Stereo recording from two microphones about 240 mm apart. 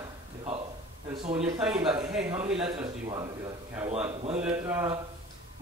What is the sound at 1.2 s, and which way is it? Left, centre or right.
Speech, right.